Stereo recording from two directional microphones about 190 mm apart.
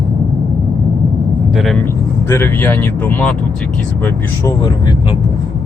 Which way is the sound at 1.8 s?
10° left (ahead or behind).